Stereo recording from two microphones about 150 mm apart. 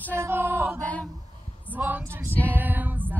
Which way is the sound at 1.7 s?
10° right (ahead or behind).